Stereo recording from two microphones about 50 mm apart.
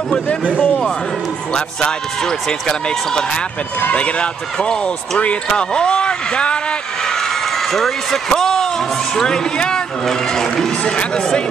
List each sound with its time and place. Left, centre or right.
0.6 s speech: left
7.1 s a sound: centre
8.7 s speech: centre
10.7 s speech: left